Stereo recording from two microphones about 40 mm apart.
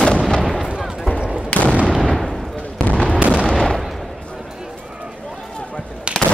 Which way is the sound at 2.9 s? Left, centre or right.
Left.